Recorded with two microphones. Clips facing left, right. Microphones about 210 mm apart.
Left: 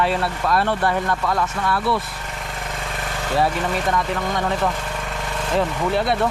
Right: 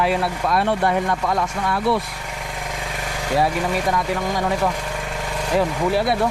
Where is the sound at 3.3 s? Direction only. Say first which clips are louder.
Right 1 dB; centre (ahead or behind).